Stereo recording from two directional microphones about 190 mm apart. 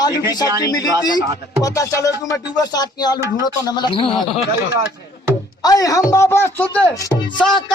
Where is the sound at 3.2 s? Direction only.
15° right (ahead or behind).